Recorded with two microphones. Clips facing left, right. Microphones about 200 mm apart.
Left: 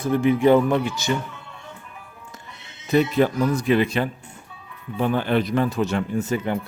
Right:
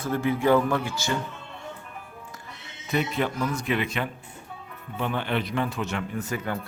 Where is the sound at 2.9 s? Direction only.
40° left (ahead or behind).